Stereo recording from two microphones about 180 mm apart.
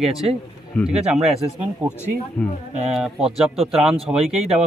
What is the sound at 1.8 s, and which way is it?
Speech, 10° right (ahead or behind).